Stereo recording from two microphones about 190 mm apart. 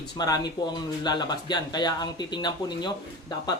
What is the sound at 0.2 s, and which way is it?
Speech, 20° left (ahead or behind).